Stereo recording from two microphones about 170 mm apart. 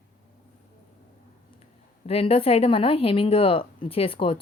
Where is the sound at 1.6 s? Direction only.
35° left (ahead or behind).